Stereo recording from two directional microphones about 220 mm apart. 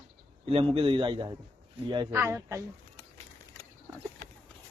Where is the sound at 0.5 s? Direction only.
25° right (ahead or behind).